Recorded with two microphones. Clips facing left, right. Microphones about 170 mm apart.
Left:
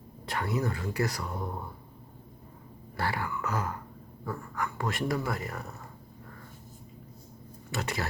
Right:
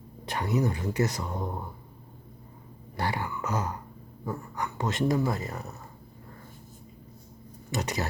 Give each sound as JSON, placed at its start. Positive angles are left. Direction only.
{"t": 0.3, "sound": "speech", "side_deg": -20}
{"t": 3.0, "sound": "a sound", "side_deg": -20}
{"t": 4.3, "sound": "speech", "side_deg": -20}
{"t": 7.7, "sound": "speech", "side_deg": -20}